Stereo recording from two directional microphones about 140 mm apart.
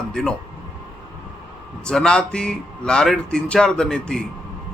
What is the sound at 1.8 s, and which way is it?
Speech, 5° left (ahead or behind).